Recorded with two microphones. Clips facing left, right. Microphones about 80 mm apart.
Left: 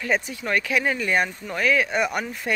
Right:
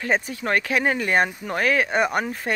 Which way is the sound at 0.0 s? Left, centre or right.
Right.